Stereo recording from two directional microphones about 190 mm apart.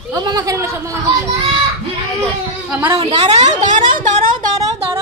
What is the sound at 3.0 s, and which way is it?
A woman's voice, 35° right (ahead or behind).